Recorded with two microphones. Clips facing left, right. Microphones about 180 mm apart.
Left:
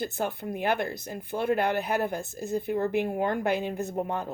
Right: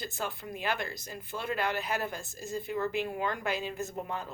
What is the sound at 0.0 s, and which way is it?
A woman's voice, 55° left (ahead or behind).